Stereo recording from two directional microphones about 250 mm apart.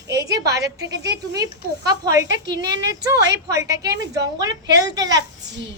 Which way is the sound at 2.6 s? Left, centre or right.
Right.